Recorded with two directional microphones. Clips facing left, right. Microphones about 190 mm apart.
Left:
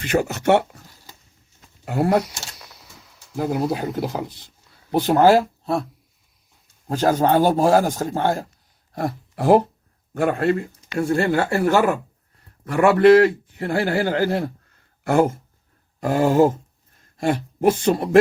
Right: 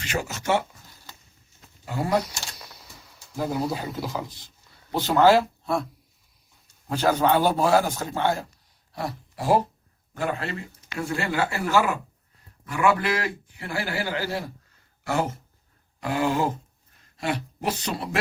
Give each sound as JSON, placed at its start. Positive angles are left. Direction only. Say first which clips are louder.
{"t": 0.0, "sound": "a man's voice", "louder": "left 9 dB", "side_deg": 55}
{"t": 1.8, "sound": "speech", "louder": "left 6 dB", "side_deg": 65}
{"t": 2.6, "sound": "a sound", "louder": "even", "side_deg": 0}
{"t": 3.3, "sound": "a man's voice", "louder": "left 4 dB", "side_deg": 55}
{"t": 6.8, "sound": "a man's voice", "louder": "left 3 dB", "side_deg": 45}
{"t": 12.6, "sound": "a man's voice", "louder": "left 10 dB", "side_deg": 60}